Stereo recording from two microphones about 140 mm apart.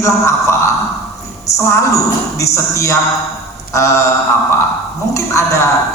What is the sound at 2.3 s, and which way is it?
A woman's voice, 20° left (ahead or behind).